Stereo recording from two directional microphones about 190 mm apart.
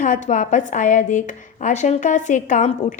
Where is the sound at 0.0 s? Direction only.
40° left (ahead or behind).